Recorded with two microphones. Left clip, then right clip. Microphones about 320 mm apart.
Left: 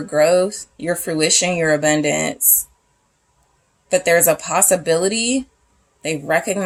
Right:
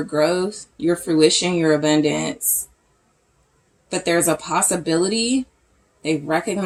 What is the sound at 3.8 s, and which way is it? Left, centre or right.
Speech, left.